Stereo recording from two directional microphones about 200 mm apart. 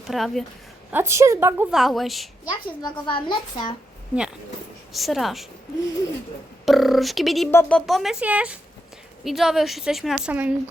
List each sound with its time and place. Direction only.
0.1 s a woman's voice: centre (ahead or behind)
0.9 s a woman's voice: 10° right (ahead or behind)
2.5 s a woman's voice: 20° left (ahead or behind)
4.1 s a woman's voice: 5° right (ahead or behind)
6.7 s a woman's voice: centre (ahead or behind)